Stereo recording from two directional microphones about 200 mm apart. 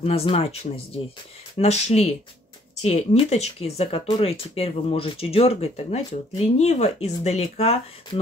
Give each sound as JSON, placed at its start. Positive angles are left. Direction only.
{"t": 0.0, "sound": "speech", "side_deg": 30}
{"t": 1.6, "sound": "speech", "side_deg": 35}